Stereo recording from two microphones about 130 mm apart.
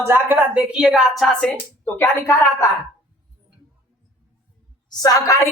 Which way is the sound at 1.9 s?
20° left (ahead or behind).